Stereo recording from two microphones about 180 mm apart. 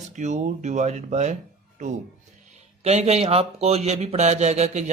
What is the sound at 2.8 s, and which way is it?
Speech, 35° right (ahead or behind).